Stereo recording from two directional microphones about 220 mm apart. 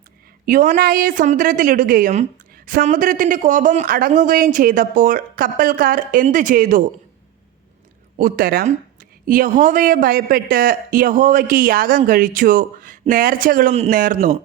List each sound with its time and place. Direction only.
0.4 s speech: 35° right (ahead or behind)
8.2 s speech: 40° right (ahead or behind)